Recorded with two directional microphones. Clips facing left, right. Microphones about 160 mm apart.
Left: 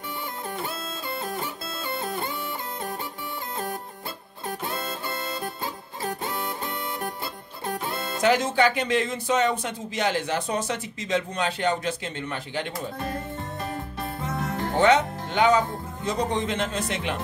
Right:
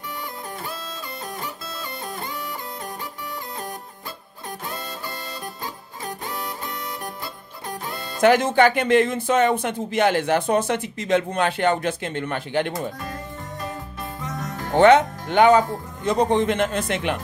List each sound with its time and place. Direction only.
8.2 s speech: 55° right (ahead or behind)
14.2 s music: 30° left (ahead or behind)
14.8 s speech: 60° right (ahead or behind)